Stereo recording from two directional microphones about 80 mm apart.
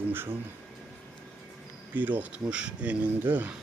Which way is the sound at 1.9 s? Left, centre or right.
Right.